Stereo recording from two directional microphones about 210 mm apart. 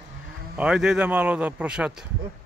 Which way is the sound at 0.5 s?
5° right (ahead or behind).